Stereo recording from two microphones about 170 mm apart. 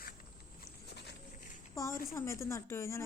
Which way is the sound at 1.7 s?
20° left (ahead or behind).